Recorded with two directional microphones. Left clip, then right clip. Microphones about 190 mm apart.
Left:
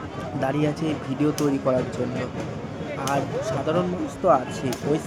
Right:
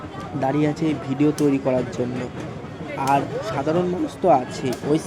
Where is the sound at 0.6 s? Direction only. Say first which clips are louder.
Right 3 dB; 15° right (ahead or behind).